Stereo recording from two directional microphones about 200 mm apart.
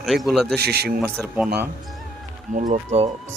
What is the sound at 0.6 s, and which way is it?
Speech, 50° right (ahead or behind).